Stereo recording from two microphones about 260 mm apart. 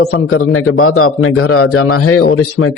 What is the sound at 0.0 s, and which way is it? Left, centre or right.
Speech, left.